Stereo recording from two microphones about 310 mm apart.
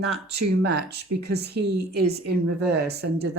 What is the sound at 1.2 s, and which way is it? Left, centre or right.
Speech, right.